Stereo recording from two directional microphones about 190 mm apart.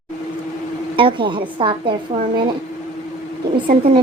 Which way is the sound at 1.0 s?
25° right (ahead or behind).